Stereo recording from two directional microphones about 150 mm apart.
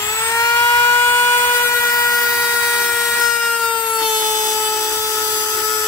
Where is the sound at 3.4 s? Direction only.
10° left (ahead or behind).